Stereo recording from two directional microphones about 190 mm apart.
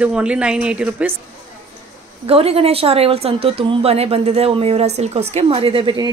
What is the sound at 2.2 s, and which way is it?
A woman's voice, 30° right (ahead or behind).